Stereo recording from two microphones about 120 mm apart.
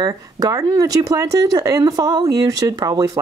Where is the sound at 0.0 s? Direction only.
30° right (ahead or behind).